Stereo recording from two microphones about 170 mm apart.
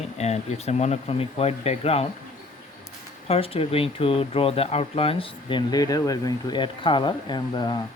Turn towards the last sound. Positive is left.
turn(degrees=25)  # may be behind; listen again after turning